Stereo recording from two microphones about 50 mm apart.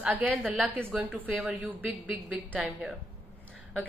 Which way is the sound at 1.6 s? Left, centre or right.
Right.